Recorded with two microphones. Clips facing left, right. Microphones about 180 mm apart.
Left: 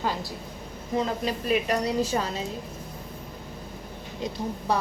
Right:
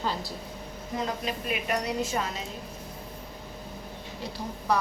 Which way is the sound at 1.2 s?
35° left (ahead or behind).